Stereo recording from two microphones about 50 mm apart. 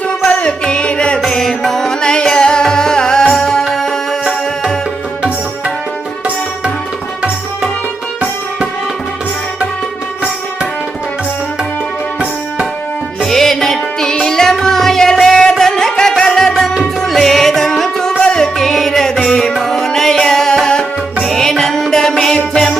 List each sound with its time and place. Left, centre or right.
0.3 s music: left
1.3 s music: centre
3.7 s tabla: centre
4.3 s music: centre
13.2 s music: centre
18.5 s music: centre